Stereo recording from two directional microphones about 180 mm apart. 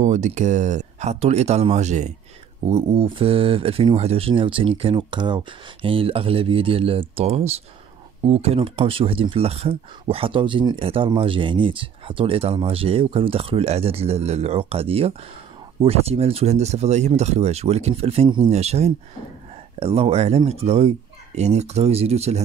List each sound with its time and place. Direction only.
0.0 s speech: 40° right (ahead or behind)